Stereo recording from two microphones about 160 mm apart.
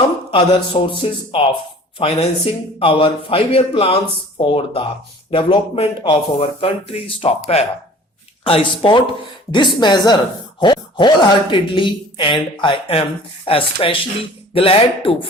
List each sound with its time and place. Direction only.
0.3 s speech: 35° left (ahead or behind)